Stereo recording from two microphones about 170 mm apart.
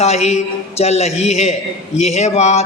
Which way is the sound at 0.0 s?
40° left (ahead or behind).